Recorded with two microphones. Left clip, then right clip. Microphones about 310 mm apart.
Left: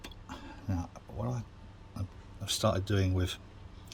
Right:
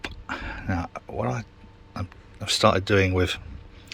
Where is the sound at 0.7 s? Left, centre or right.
Right.